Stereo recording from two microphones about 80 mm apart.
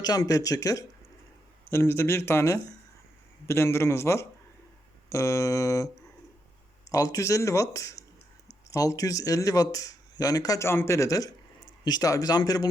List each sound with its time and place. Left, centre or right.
0.0 s speech: left
1.7 s speech: left
6.9 s speech: left
10.6 s speech: left